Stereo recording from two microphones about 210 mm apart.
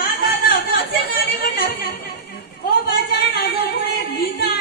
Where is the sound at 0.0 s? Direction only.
45° left (ahead or behind).